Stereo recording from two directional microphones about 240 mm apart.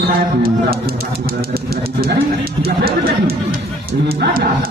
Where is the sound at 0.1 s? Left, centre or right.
Right.